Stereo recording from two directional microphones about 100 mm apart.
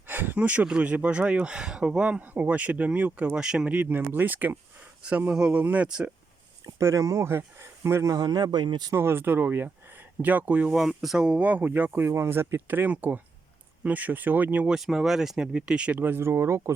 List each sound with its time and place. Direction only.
0.1 s speech: 20° right (ahead or behind)
6.7 s speech: 30° right (ahead or behind); by 8.9 s 50° right (ahead or behind)
8.9 s speech: 25° right (ahead or behind)
10.8 s speech: centre (ahead or behind)
14.8 s speech: 5° right (ahead or behind); by 16.7 s 30° right (ahead or behind)